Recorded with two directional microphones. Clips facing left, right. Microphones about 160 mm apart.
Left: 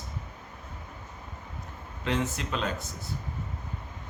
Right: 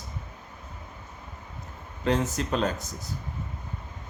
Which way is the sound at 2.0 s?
40° right (ahead or behind).